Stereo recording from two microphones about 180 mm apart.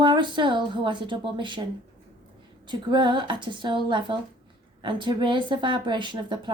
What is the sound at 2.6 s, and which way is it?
A woman's voice, 25° right (ahead or behind).